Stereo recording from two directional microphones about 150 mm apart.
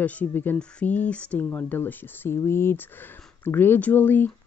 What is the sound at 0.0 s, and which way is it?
Speech, 10° left (ahead or behind).